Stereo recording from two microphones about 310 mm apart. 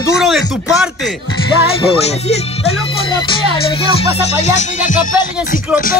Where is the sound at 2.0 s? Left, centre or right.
Centre.